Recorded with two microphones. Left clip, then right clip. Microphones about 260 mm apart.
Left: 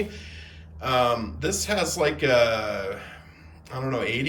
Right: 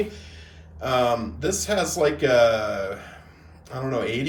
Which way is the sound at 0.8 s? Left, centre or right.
Centre.